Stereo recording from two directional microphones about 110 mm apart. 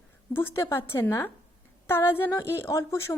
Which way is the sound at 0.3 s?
20° left (ahead or behind).